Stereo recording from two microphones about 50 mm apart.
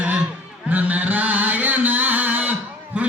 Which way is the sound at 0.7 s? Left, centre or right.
Right.